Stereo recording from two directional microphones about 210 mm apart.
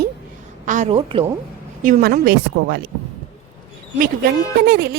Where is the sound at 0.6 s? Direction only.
35° right (ahead or behind).